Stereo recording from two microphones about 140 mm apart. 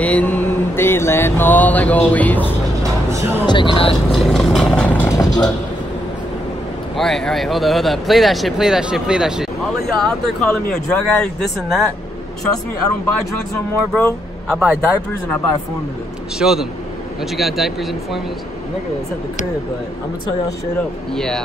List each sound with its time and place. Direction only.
0.0 s mantra: 10° left (ahead or behind)
2.8 s music: 20° right (ahead or behind)
3.4 s speech: 35° left (ahead or behind)
4.1 s speech: centre (ahead or behind)
5.0 s vehicle: 25° left (ahead or behind)
7.0 s speech: 5° left (ahead or behind)
10.0 s speech: 5° left (ahead or behind)
13.9 s speech: 10° left (ahead or behind)
16.3 s speech: 5° right (ahead or behind)
21.1 s speech: 5° left (ahead or behind)